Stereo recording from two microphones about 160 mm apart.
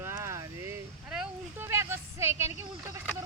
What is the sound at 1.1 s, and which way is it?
Speech, 5° right (ahead or behind).